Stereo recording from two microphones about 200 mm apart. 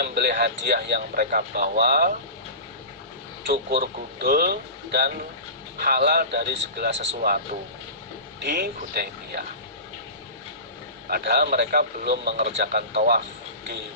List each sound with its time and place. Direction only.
0.0 s speech: 55° right (ahead or behind)
3.4 s speech: 50° right (ahead or behind)
8.4 s speech: 50° right (ahead or behind)
11.1 s speech: 50° right (ahead or behind)